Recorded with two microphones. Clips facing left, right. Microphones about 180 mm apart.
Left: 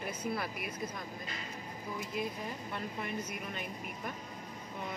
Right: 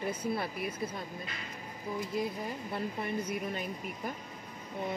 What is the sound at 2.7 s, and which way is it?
Speech, 30° right (ahead or behind).